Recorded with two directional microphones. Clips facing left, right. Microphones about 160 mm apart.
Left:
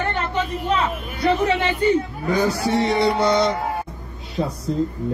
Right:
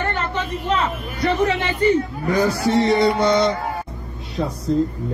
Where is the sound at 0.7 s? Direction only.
Centre (ahead or behind).